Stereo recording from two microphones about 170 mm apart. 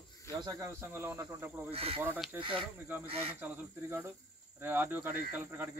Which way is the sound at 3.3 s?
10° right (ahead or behind).